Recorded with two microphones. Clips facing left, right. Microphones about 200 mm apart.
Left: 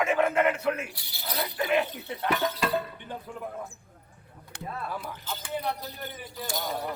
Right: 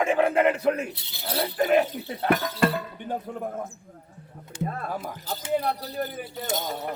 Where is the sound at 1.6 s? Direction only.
40° right (ahead or behind).